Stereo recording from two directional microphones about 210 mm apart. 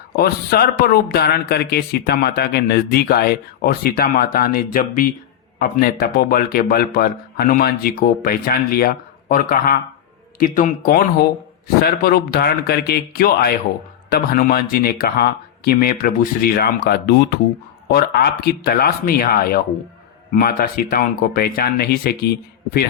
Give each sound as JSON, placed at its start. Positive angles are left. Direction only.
{"t": 0.2, "sound": "speech", "side_deg": 45}